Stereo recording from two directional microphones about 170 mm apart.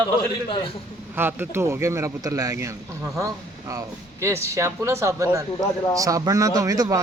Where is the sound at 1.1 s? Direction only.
10° right (ahead or behind).